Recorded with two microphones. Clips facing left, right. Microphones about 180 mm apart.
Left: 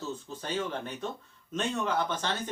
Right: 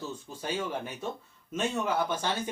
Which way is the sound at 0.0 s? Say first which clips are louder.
Even; 10° right (ahead or behind).